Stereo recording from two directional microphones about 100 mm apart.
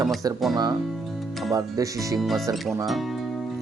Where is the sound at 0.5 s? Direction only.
40° right (ahead or behind).